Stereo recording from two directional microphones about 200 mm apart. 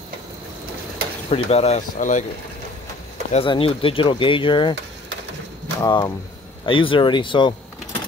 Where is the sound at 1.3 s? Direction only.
30° left (ahead or behind).